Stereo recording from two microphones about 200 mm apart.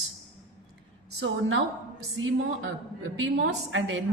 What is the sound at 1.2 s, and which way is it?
Speech, 70° right (ahead or behind).